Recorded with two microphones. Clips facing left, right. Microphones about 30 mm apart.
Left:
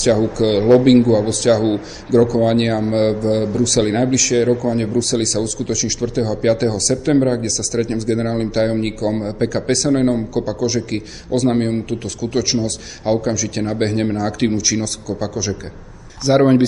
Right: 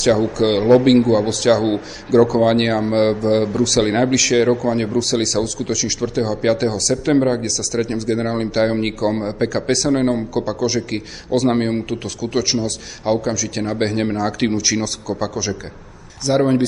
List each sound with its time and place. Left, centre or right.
0.4 s a man's voice: centre
3.8 s speech: right
4.1 s a man's voice: centre
16.3 s speech: centre